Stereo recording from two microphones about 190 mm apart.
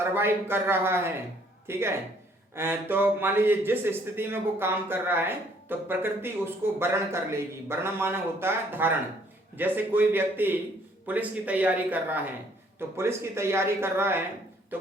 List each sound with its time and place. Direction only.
0.1 s speech: 10° right (ahead or behind)